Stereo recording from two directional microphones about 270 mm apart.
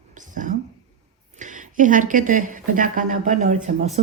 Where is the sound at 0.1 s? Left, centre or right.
Right.